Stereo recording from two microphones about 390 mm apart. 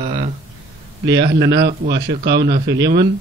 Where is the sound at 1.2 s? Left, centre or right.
Right.